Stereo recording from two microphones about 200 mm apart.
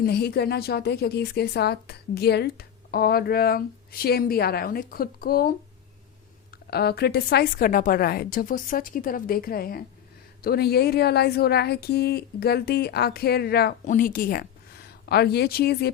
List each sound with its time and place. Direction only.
0.0 s a woman's voice: 55° left (ahead or behind)